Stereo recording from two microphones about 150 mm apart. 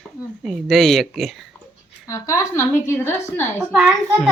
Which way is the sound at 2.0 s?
20° left (ahead or behind).